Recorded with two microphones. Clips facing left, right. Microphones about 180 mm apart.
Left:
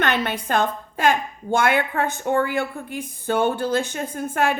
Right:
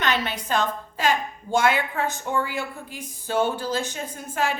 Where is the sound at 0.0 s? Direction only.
55° left (ahead or behind).